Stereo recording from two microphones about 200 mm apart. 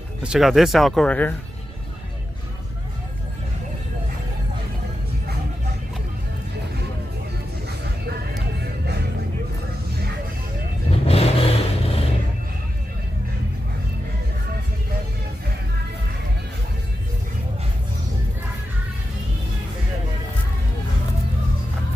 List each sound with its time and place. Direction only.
0.2 s speech: centre (ahead or behind)
10.9 s vehicle: 30° left (ahead or behind)